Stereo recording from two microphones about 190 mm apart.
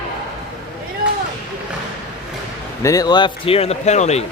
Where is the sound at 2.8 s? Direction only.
20° left (ahead or behind); by 4.2 s 35° left (ahead or behind).